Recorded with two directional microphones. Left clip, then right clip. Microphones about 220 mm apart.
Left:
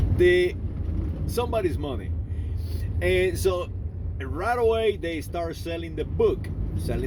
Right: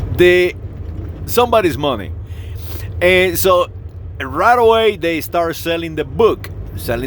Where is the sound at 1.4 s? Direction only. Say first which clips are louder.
Right 13 dB; 40° right (ahead or behind).